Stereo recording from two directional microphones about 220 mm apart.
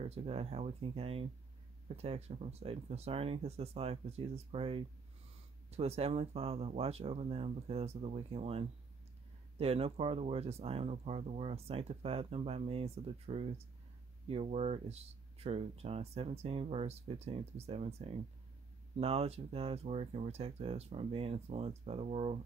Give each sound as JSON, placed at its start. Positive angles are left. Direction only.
{"t": 0.0, "sound": "speech", "side_deg": -30}